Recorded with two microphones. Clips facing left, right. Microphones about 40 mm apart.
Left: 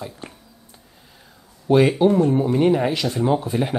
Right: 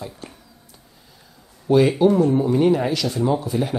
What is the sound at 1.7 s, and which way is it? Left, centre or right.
Speech, left.